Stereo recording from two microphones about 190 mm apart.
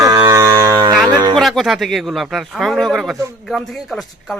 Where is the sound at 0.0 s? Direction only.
15° right (ahead or behind).